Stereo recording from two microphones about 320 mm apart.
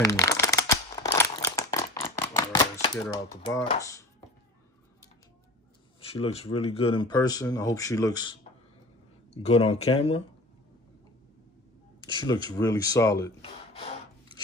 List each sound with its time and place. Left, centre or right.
0.0 s shuffling cards: centre
5.9 s speech: centre
12.0 s speech: centre